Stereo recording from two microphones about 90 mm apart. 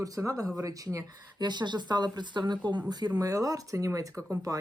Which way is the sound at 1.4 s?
55° right (ahead or behind).